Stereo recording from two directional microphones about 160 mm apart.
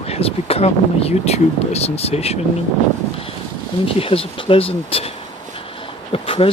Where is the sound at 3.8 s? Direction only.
35° left (ahead or behind).